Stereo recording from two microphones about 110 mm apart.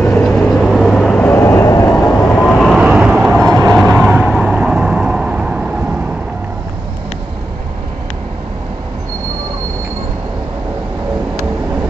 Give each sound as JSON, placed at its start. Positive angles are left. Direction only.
{"t": 0.0, "sound": "vehicle", "side_deg": 10}
{"t": 1.4, "sound": "vehicle", "side_deg": 25}
{"t": 2.0, "sound": "vehicle", "side_deg": 15}
{"t": 2.8, "sound": "vehicle", "side_deg": -10}